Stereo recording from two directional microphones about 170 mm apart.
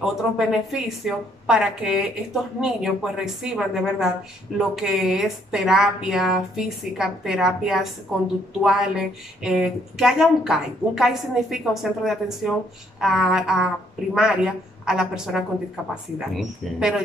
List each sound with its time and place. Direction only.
0.0 s a woman's voice: centre (ahead or behind)